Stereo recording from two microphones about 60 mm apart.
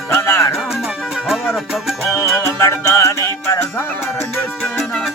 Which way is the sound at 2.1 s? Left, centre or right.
Left.